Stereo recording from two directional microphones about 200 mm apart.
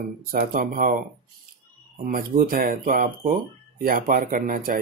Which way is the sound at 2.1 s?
45° right (ahead or behind).